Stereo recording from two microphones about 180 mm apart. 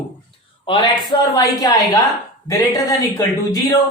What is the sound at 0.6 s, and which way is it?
Speech, 25° left (ahead or behind).